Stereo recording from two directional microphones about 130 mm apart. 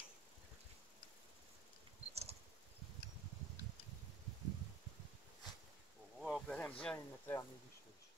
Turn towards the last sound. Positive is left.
turn(degrees=10)  # may be behind; listen again after turning